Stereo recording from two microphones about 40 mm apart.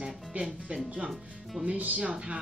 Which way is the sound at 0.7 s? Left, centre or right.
Right.